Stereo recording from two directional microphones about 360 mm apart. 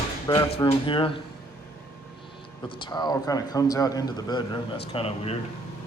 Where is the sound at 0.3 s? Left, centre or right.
Centre.